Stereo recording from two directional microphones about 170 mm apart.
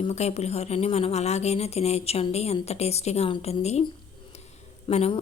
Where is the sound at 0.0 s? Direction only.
40° left (ahead or behind).